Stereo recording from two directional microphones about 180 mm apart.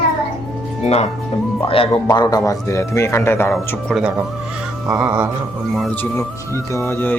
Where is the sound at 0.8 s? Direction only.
40° left (ahead or behind); by 3.5 s 15° left (ahead or behind).